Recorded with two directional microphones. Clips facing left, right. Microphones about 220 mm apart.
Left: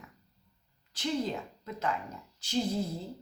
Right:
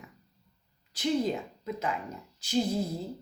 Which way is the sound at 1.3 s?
10° right (ahead or behind).